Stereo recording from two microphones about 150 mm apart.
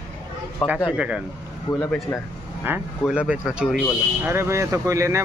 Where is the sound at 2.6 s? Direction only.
10° right (ahead or behind).